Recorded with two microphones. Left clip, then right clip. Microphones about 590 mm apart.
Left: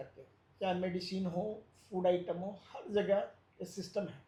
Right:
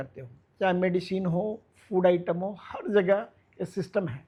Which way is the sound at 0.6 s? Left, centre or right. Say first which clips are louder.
Right 10 dB; right.